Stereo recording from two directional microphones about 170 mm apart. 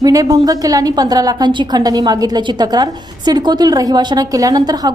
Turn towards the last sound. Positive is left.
turn(degrees=-25)  # may be behind; listen again after turning